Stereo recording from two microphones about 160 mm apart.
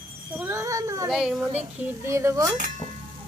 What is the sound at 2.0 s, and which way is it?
Speech, 15° right (ahead or behind).